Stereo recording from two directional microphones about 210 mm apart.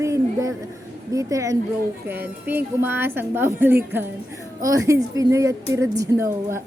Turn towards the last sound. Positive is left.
turn(degrees=-10)  # may be behind; listen again after turning